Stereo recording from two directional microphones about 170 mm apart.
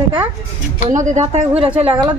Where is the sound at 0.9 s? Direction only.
45° right (ahead or behind).